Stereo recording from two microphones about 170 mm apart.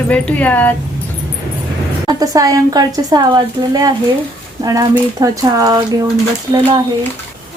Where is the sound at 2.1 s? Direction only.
20° right (ahead or behind).